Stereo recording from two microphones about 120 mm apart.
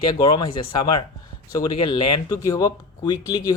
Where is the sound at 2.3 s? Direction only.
30° left (ahead or behind).